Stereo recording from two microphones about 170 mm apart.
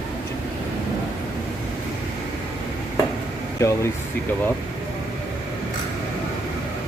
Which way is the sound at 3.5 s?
15° left (ahead or behind).